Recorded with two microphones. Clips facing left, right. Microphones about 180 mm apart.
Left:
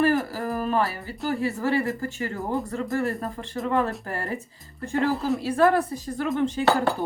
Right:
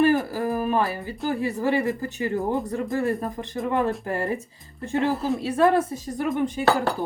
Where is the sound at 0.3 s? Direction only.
20° right (ahead or behind).